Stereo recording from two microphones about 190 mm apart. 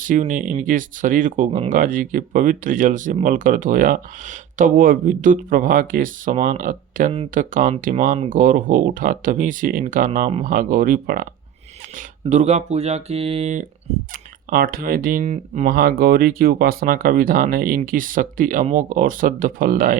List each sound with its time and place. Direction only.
0.0 s speech: 40° right (ahead or behind)
14.1 s speech: 50° right (ahead or behind)